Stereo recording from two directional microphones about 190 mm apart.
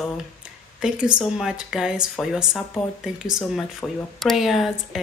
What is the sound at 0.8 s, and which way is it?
Speech, 5° right (ahead or behind).